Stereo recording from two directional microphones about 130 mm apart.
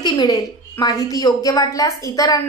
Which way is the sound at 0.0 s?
30° left (ahead or behind).